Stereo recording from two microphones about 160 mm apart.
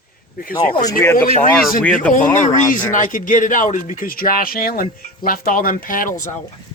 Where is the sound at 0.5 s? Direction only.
30° left (ahead or behind).